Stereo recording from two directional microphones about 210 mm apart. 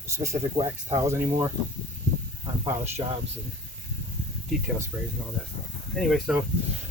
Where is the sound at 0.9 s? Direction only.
15° right (ahead or behind).